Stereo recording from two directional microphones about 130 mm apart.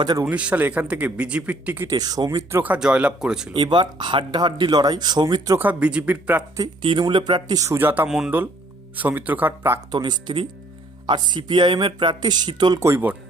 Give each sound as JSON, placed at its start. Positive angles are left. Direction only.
{"t": 0.0, "sound": "speech", "side_deg": -30}
{"t": 0.3, "sound": "a man's voice", "side_deg": -10}
{"t": 1.9, "sound": "speech", "side_deg": -30}
{"t": 2.6, "sound": "a man's voice", "side_deg": -10}
{"t": 3.5, "sound": "speech", "side_deg": -35}
{"t": 5.5, "sound": "a man's voice", "side_deg": -10}
{"t": 7.0, "sound": "a man's voice", "side_deg": -35}
{"t": 9.9, "sound": "speech", "side_deg": -35}
{"t": 12.8, "sound": "a man's voice", "side_deg": -15}